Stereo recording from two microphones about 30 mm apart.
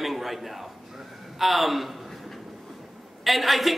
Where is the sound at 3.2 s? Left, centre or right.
Centre.